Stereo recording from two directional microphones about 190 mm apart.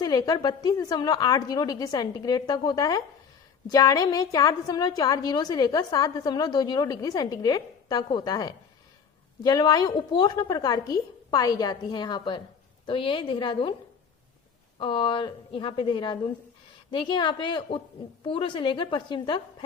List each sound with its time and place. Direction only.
0.0 s a woman's voice: 20° left (ahead or behind)
14.8 s a woman's voice: 25° left (ahead or behind)